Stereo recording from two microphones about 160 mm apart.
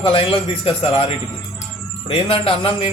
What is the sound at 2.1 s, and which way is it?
Speech, 35° left (ahead or behind).